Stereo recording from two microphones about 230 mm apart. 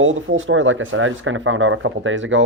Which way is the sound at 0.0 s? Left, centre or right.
Right.